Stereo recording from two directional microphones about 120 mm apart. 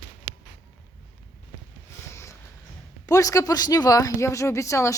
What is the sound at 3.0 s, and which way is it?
Speech, 30° left (ahead or behind).